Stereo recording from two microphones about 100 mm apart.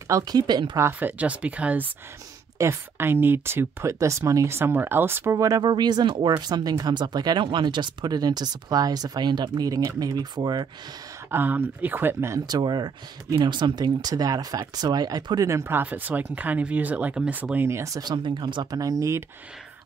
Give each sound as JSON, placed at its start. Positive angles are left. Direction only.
{"t": 0.1, "sound": "speech", "side_deg": -40}
{"t": 0.9, "sound": "speech", "side_deg": -15}
{"t": 2.6, "sound": "speech", "side_deg": -25}
{"t": 11.2, "sound": "speech", "side_deg": -20}
{"t": 12.4, "sound": "speech", "side_deg": -45}